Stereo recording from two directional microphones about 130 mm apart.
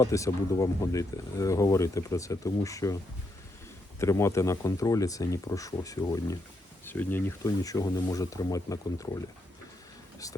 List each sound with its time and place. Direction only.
0.0 s speech: 25° left (ahead or behind)
4.0 s speech: 20° left (ahead or behind)
6.8 s speech: 15° left (ahead or behind)
7.4 s speech: 25° left (ahead or behind)